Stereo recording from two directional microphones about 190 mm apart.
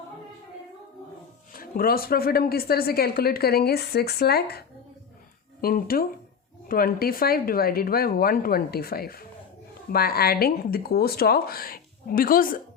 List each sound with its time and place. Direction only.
1.5 s a woman's voice: 50° left (ahead or behind)
5.6 s a woman's voice: 50° left (ahead or behind)